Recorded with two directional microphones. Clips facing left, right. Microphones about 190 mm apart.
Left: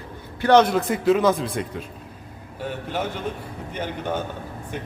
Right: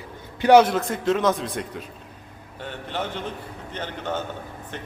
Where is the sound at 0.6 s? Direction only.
Centre (ahead or behind).